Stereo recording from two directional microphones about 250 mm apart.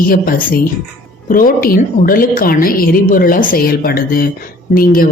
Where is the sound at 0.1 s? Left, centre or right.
Left.